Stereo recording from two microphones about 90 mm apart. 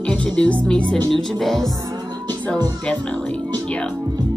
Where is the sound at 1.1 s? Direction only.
Centre (ahead or behind).